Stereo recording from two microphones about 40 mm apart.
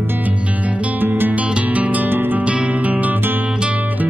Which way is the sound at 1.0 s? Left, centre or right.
Right.